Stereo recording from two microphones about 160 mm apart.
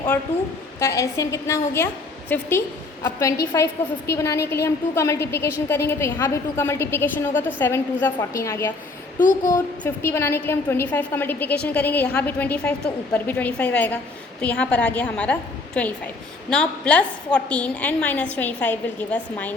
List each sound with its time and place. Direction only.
0.8 s a woman's voice: 20° left (ahead or behind)
9.2 s a sound: 55° left (ahead or behind)
9.8 s a woman's voice: 15° left (ahead or behind)